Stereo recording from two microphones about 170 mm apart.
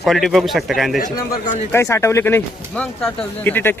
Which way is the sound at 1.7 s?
15° left (ahead or behind).